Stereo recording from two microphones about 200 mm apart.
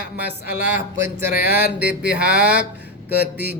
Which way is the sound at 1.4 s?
50° left (ahead or behind).